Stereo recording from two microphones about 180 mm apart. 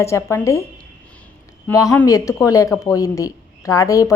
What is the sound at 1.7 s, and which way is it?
Speech, 15° left (ahead or behind).